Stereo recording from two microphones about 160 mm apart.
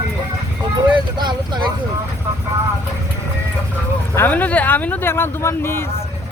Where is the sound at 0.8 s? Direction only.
30° right (ahead or behind).